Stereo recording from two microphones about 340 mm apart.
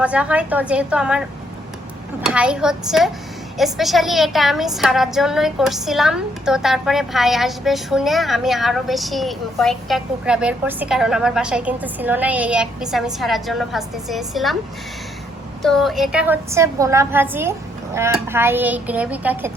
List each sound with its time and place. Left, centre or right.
0.0 s a woman's voice: centre
2.2 s a woman's voice: centre
15.6 s a woman's voice: centre